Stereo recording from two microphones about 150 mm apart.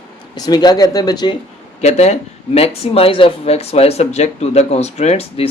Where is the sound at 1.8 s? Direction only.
45° left (ahead or behind).